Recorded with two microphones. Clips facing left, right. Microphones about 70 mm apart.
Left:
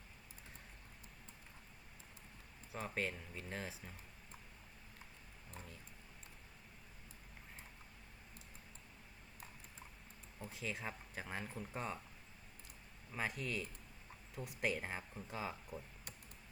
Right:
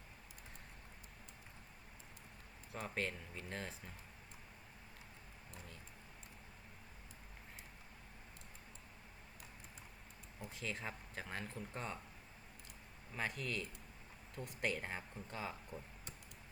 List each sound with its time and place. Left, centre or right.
2.7 s speech: centre
10.5 s speech: centre
13.1 s speech: centre